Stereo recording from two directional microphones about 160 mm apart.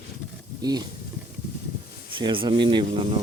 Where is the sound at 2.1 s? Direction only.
30° right (ahead or behind).